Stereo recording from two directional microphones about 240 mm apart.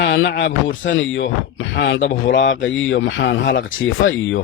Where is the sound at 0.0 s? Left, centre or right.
Left.